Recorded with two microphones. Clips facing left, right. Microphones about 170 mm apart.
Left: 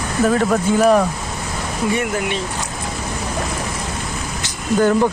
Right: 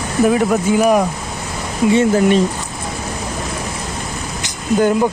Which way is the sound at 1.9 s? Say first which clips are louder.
Right 8 dB; 25° right (ahead or behind).